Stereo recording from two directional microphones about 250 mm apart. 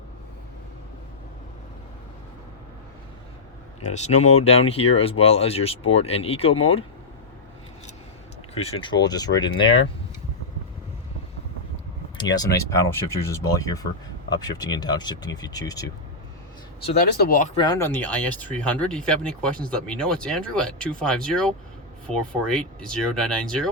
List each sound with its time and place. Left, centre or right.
3.8 s speech: left
8.5 s speech: left
12.1 s speech: centre
17.2 s speech: left
17.6 s speech: centre